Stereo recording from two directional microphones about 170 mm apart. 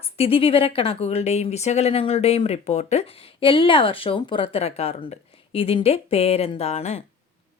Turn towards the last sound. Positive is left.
turn(degrees=40)  # may be behind; listen again after turning